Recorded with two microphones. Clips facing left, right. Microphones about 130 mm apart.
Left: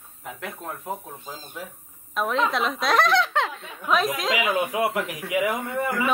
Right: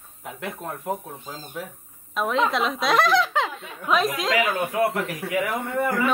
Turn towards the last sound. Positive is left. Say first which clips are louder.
# right 2 dB
turn(degrees=5)  # may be behind; listen again after turning